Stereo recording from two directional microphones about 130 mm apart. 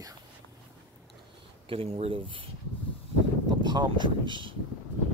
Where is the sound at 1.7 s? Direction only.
50° right (ahead or behind).